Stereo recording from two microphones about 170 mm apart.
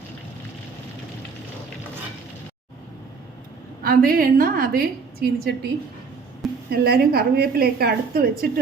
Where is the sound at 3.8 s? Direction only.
60° right (ahead or behind).